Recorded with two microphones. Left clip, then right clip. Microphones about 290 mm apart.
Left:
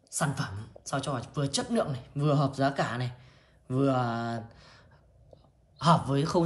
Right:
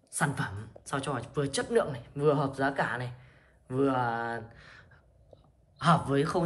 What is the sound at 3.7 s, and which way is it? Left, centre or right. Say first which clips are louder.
Mantra: even; centre.